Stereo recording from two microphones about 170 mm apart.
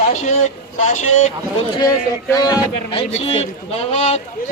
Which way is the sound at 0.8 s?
45° left (ahead or behind).